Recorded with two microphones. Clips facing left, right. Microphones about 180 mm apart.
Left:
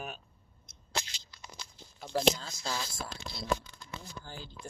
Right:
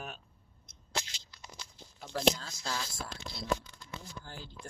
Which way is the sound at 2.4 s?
5° left (ahead or behind).